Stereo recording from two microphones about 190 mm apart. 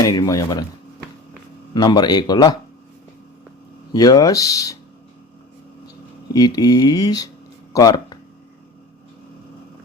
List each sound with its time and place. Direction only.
0.0 s speech: 20° left (ahead or behind)
1.7 s speech: 20° left (ahead or behind)
3.9 s speech: 20° left (ahead or behind)
6.3 s speech: 20° left (ahead or behind)
7.7 s a sound: 20° left (ahead or behind)